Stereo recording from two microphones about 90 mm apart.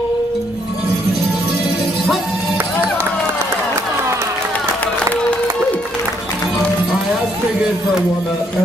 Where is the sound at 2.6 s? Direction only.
25° right (ahead or behind).